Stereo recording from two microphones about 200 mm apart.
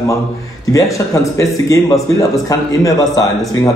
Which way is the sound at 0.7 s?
15° left (ahead or behind).